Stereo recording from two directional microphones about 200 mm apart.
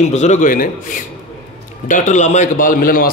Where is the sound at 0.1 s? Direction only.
35° left (ahead or behind).